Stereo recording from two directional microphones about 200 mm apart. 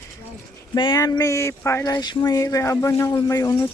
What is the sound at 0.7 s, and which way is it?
Speech, 20° left (ahead or behind).